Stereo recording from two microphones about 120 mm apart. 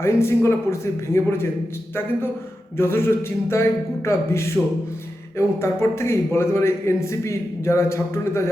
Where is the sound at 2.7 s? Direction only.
20° left (ahead or behind).